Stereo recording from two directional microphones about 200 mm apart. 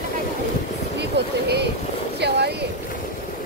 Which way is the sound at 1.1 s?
55° right (ahead or behind).